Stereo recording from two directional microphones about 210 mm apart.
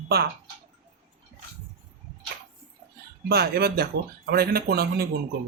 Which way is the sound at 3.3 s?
50° right (ahead or behind).